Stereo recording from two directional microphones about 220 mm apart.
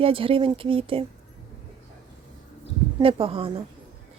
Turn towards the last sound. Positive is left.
turn(degrees=-25)  # may be behind; listen again after turning